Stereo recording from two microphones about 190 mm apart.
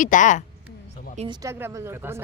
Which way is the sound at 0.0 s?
40° left (ahead or behind).